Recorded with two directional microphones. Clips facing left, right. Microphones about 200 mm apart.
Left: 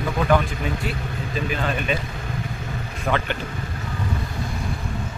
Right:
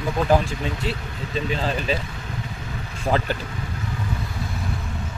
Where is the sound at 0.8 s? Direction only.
30° right (ahead or behind).